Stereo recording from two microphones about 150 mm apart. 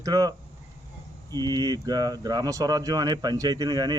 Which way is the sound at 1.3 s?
25° right (ahead or behind).